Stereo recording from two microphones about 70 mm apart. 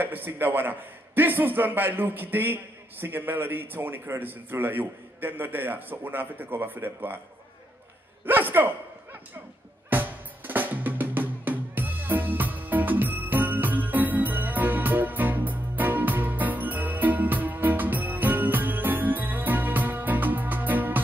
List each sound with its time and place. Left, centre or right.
0.0 s a man's voice: right
8.3 s speech: right
9.8 s drum: right